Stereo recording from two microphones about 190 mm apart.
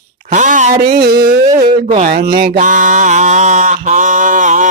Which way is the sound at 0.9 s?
50° right (ahead or behind).